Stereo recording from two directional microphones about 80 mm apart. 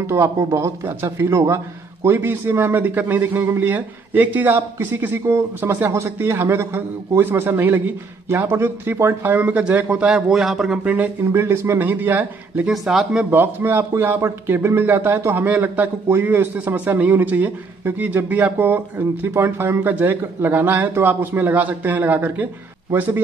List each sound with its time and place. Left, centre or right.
0.0 s speech: right
5.9 s speech: right; by 10.2 s centre
10.3 s speech: centre
10.8 s speech: centre
11.8 s speech: right
12.6 s speech: centre
13.2 s speech: right